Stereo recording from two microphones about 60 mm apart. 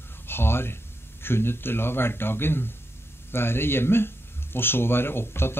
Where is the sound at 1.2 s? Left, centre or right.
Left.